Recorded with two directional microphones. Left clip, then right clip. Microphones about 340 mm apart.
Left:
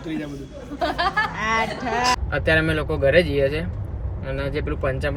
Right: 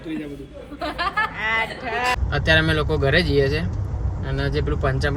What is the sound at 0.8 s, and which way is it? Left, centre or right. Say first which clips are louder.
Speech: left 2 dB; left.